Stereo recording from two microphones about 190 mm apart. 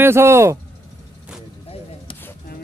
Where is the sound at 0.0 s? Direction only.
15° right (ahead or behind).